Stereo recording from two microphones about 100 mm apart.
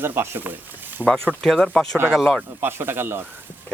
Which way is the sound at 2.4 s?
20° right (ahead or behind).